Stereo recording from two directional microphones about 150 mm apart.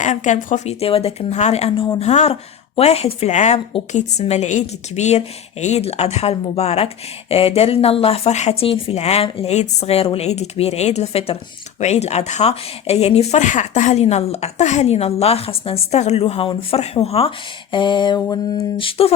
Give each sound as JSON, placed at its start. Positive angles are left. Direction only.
{"t": 0.0, "sound": "a woman's voice", "side_deg": 55}